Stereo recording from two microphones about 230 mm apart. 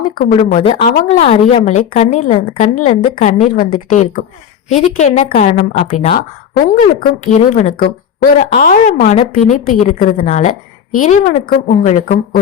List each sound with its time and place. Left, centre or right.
0.2 s a woman's voice: left